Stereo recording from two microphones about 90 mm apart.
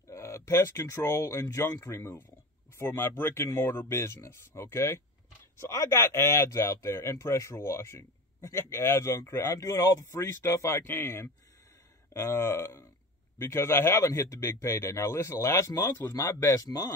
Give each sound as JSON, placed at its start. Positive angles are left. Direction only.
{"t": 0.1, "sound": "speech", "side_deg": 30}